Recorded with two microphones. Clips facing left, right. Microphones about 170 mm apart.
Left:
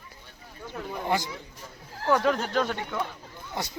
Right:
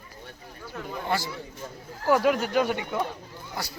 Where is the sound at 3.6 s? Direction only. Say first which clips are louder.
Left 2 dB; 20° left (ahead or behind).